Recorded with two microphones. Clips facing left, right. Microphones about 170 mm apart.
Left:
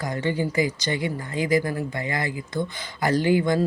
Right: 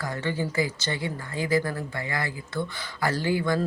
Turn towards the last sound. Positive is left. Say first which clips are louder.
# left 5 dB
turn(degrees=20)  # may be behind; listen again after turning